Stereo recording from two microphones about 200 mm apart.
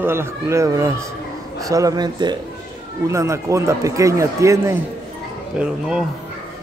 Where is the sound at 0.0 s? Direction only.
10° right (ahead or behind).